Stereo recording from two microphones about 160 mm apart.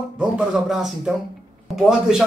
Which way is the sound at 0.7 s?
5° right (ahead or behind).